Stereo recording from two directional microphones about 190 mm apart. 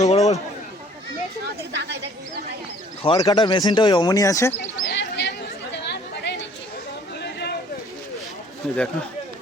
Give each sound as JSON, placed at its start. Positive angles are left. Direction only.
{"t": 0.0, "sound": "chatter", "side_deg": 35}
{"t": 1.7, "sound": "a woman's voice", "side_deg": -65}
{"t": 3.0, "sound": "speech", "side_deg": 25}
{"t": 4.8, "sound": "a sound", "side_deg": 60}
{"t": 5.7, "sound": "chatter", "side_deg": 65}
{"t": 7.2, "sound": "a sound", "side_deg": 60}
{"t": 8.6, "sound": "speech", "side_deg": 0}